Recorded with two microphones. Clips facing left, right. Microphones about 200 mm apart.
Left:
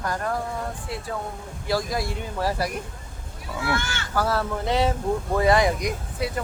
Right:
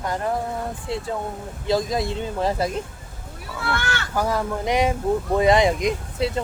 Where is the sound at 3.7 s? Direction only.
60° right (ahead or behind).